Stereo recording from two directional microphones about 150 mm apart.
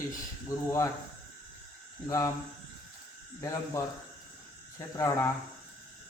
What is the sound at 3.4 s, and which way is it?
Speech, 20° left (ahead or behind).